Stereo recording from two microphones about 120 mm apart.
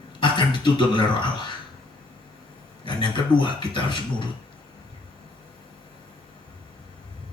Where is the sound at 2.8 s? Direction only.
40° left (ahead or behind).